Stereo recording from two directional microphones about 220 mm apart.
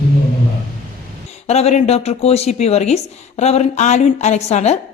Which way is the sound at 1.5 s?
30° left (ahead or behind).